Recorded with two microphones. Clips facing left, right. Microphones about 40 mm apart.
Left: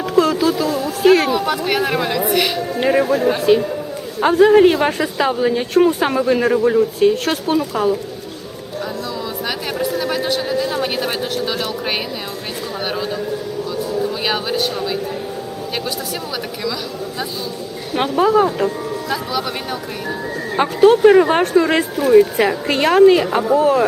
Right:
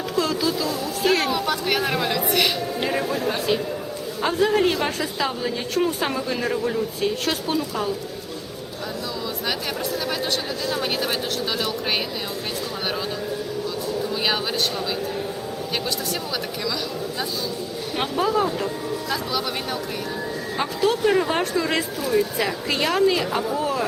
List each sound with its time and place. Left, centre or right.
0.2 s a sound: left
1.1 s a woman's voice: centre
2.7 s speech: left
4.4 s speech: left
10.0 s a woman's voice: centre
14.0 s speech: centre
17.9 s speech: centre
19.1 s a woman's voice: centre
20.6 s speech: left
21.0 s speech: left
21.4 s speech: left
22.1 s speech: left